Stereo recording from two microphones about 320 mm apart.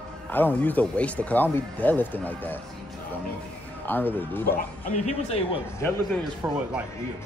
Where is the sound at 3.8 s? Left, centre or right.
Centre.